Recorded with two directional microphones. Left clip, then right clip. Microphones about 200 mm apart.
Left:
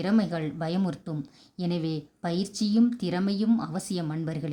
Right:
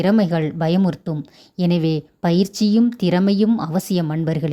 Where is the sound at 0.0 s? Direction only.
35° right (ahead or behind).